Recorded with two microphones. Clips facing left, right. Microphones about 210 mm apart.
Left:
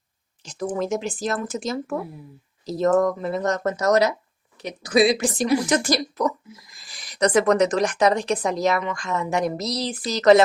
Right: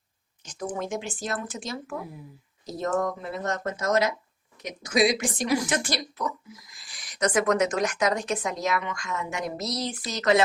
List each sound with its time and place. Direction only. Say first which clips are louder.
0.8 s speech: left 8 dB; 40° left (ahead or behind)
3.2 s speech: left 7 dB; 40° left (ahead or behind)